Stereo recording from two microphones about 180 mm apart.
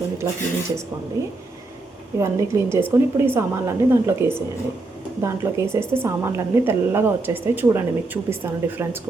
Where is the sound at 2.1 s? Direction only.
15° right (ahead or behind).